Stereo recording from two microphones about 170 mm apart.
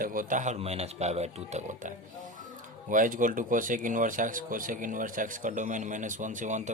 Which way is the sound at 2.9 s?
50° right (ahead or behind).